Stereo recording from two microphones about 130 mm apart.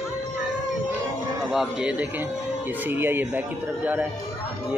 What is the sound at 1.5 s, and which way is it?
Speech, 5° right (ahead or behind).